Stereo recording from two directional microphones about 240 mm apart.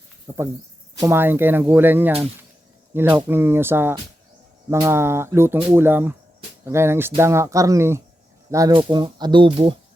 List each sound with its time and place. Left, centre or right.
0.3 s speech: centre